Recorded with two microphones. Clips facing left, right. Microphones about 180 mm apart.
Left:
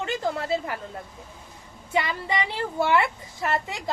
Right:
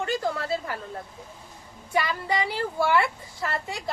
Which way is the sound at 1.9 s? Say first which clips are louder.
Even; 20° left (ahead or behind).